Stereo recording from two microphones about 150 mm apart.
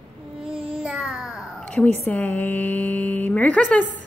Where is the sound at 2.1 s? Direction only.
10° left (ahead or behind).